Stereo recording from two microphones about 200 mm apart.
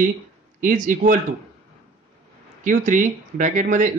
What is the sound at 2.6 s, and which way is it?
Speech, 40° right (ahead or behind).